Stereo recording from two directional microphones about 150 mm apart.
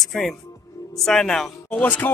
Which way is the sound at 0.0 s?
Centre (ahead or behind).